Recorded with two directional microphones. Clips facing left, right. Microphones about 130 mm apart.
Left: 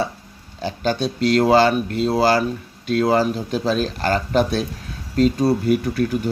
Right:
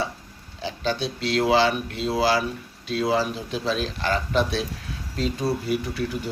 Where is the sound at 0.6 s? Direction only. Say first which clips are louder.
Left 5 dB; 45° left (ahead or behind).